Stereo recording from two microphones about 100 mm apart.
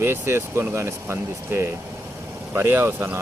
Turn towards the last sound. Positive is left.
turn(degrees=-25)  # may be behind; listen again after turning